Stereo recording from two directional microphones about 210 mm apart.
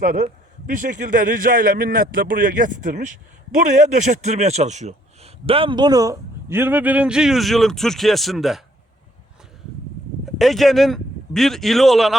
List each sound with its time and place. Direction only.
0.0 s a man's voice: 40° right (ahead or behind); by 8.6 s centre (ahead or behind)
10.2 s a man's voice: centre (ahead or behind)